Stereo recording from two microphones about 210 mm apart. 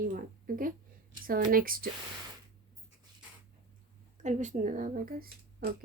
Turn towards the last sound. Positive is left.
turn(degrees=-45)  # may be behind; listen again after turning